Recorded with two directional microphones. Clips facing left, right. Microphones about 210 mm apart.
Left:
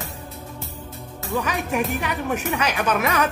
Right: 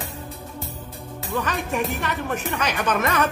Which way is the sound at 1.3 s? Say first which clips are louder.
Left 1 dB; 10° left (ahead or behind).